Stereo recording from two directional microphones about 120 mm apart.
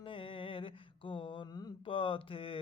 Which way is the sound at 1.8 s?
45° left (ahead or behind).